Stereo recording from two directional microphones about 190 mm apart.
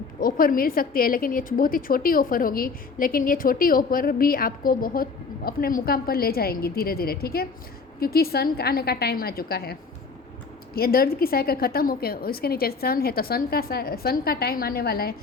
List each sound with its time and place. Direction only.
0.2 s a woman's voice: 50° left (ahead or behind)
10.8 s a woman's voice: 55° left (ahead or behind)